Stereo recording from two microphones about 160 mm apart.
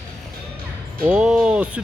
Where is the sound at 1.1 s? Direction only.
5° right (ahead or behind).